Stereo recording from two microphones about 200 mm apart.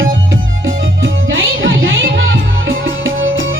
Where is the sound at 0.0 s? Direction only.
70° right (ahead or behind).